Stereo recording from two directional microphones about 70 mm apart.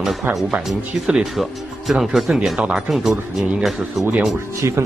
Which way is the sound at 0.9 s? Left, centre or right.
Centre.